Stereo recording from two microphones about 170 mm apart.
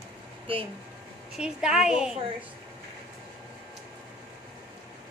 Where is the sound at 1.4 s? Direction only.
5° right (ahead or behind).